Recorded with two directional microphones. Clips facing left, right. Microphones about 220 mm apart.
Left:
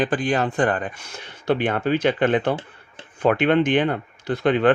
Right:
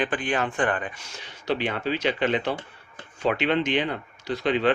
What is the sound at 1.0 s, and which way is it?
Speech, 55° left (ahead or behind).